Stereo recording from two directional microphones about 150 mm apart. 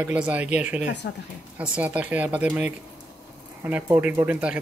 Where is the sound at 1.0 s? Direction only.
90° left.